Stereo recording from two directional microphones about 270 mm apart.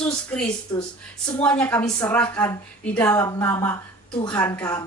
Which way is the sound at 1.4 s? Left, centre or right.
Centre.